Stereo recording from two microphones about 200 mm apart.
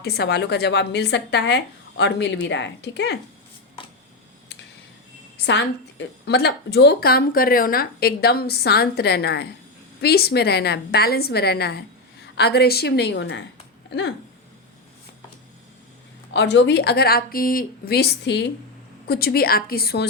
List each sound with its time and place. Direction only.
0.0 s speech: 55° left (ahead or behind)
5.5 s a woman's voice: 60° left (ahead or behind)
16.3 s a woman's voice: 65° left (ahead or behind)